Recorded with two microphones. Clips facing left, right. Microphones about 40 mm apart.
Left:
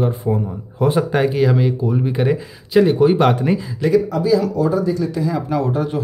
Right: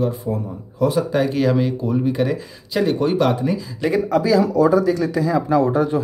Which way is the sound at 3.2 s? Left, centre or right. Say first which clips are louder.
Left 3 dB; left.